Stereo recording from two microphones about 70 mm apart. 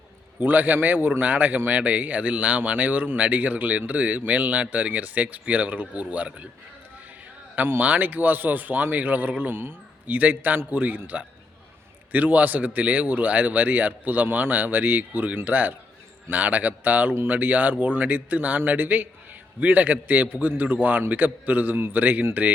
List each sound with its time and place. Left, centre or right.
0.3 s speech: right
7.5 s speech: right